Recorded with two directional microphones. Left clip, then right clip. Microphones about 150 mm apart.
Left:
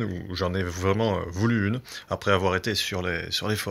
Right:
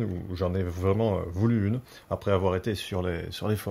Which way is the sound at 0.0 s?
5° right (ahead or behind).